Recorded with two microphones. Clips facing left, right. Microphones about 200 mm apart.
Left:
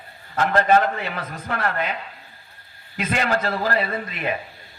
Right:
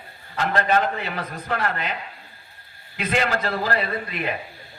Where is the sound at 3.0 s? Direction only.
45° left (ahead or behind).